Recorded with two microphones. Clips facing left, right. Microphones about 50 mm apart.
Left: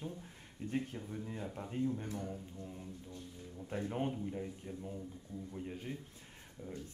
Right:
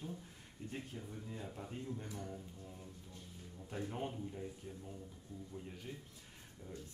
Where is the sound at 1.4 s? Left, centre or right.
Left.